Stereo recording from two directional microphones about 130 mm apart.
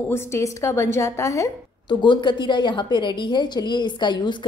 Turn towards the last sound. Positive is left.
turn(degrees=35)  # may be behind; listen again after turning